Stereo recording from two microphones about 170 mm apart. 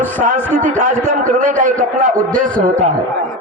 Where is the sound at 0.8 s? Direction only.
45° right (ahead or behind).